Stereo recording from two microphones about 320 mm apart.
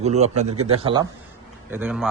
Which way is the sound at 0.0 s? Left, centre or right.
Right.